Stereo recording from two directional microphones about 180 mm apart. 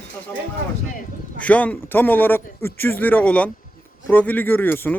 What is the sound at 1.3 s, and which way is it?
Speech, 10° left (ahead or behind).